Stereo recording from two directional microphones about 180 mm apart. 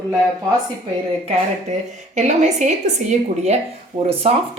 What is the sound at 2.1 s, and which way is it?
Speech, 40° right (ahead or behind).